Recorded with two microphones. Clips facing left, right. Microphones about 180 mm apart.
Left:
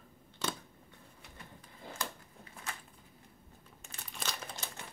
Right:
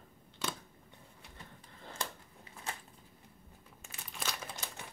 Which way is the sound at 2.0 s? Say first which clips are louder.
Even; 30° right (ahead or behind).